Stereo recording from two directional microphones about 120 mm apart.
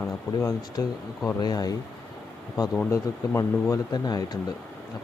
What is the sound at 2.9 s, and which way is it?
Speech, 25° left (ahead or behind).